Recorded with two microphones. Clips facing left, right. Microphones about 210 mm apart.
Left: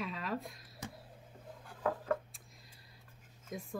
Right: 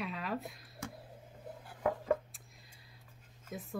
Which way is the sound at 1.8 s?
20° right (ahead or behind).